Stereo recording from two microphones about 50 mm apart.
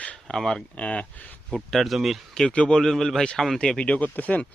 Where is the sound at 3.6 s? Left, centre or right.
Centre.